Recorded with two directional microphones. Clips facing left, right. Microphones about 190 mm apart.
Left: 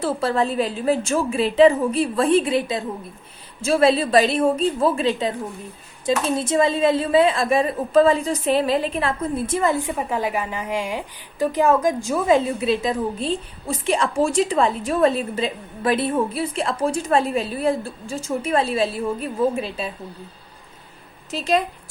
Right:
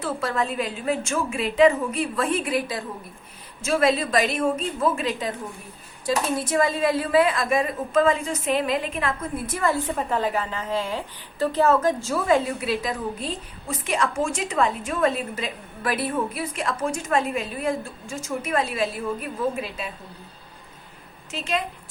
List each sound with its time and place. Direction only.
0.0 s a woman's voice: 30° left (ahead or behind)
10.0 s a woman's voice: 10° left (ahead or behind); by 19.9 s 30° left (ahead or behind)
21.2 s a woman's voice: 35° left (ahead or behind)